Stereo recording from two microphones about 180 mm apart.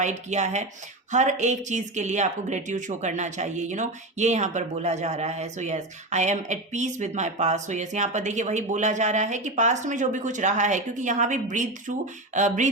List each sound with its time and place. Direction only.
0.0 s speech: 40° right (ahead or behind)